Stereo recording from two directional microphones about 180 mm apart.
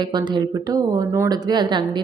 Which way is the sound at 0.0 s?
25° right (ahead or behind).